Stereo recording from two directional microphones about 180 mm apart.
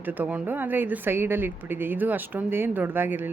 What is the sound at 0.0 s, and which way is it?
Speech, 10° right (ahead or behind).